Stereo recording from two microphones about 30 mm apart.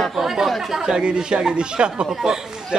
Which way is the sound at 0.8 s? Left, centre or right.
Right.